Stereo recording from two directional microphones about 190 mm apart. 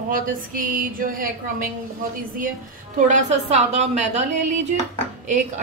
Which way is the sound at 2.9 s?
40° right (ahead or behind).